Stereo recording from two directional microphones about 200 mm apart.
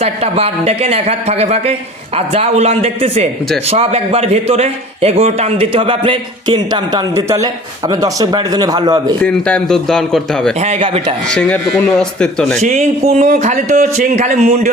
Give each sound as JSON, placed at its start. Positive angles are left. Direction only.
{"t": 0.0, "sound": "a man's voice", "side_deg": -30}
{"t": 9.2, "sound": "speech", "side_deg": 5}
{"t": 10.6, "sound": "a man's voice", "side_deg": -30}
{"t": 11.3, "sound": "speech", "side_deg": 10}
{"t": 12.6, "sound": "speech", "side_deg": -35}